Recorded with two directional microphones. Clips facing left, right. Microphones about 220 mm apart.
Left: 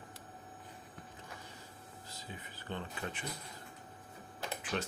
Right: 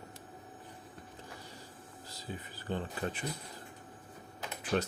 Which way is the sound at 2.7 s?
35° right (ahead or behind).